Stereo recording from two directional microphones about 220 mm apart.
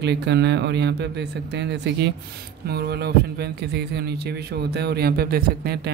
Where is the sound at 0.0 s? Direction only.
50° right (ahead or behind).